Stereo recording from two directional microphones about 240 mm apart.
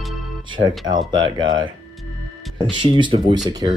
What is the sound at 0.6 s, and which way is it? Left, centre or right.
Speech, centre.